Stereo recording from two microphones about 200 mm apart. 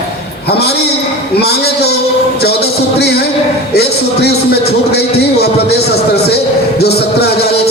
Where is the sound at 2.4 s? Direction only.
55° left (ahead or behind).